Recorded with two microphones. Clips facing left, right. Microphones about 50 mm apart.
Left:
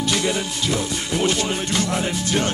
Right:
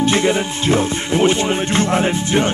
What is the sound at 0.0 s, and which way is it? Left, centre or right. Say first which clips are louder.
Speech: right 6 dB; right.